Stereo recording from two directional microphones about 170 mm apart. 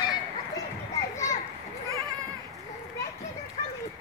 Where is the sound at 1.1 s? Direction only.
15° left (ahead or behind).